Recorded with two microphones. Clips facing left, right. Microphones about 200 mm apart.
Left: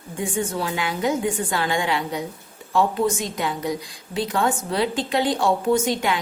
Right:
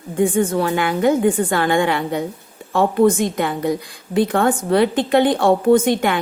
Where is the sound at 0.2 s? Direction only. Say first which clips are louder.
Right 9 dB; 55° right (ahead or behind).